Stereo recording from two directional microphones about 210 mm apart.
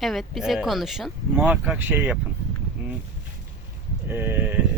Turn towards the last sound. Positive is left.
turn(degrees=-10)  # may be behind; listen again after turning